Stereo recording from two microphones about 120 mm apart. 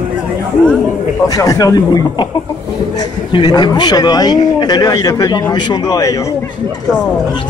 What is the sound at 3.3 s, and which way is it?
Speech, 35° left (ahead or behind).